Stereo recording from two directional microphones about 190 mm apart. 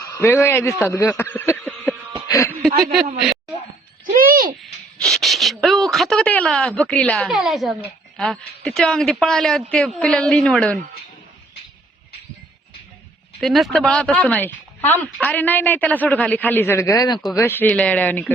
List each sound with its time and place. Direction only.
0.2 s speech: 10° left (ahead or behind)
2.2 s a sound: 15° left (ahead or behind)
4.0 s speech: 45° right (ahead or behind)
5.0 s speech: centre (ahead or behind)
13.4 s speech: centre (ahead or behind)